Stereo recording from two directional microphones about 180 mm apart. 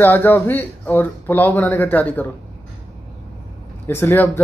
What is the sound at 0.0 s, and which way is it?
A man's voice, 10° left (ahead or behind).